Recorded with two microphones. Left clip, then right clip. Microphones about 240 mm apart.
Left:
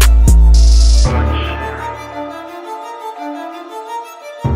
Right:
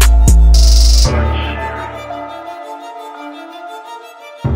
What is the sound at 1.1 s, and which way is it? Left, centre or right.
Music, centre.